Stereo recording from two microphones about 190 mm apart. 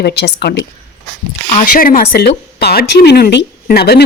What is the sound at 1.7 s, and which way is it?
A woman's voice, 50° left (ahead or behind).